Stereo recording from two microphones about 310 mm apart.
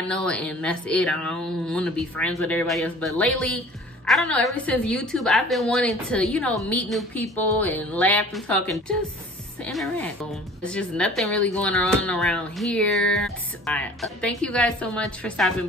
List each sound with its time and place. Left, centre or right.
0.1 s a woman's voice: centre